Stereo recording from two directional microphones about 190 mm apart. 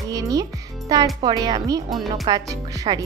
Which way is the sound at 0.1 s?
20° right (ahead or behind).